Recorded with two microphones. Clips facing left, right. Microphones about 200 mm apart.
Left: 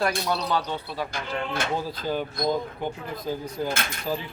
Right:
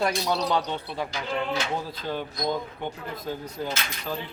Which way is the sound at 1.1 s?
50° left (ahead or behind).